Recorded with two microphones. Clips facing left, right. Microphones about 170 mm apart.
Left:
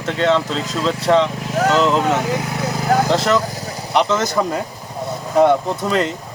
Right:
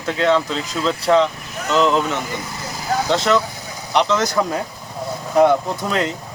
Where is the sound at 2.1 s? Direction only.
85° left; by 3.1 s 60° left (ahead or behind).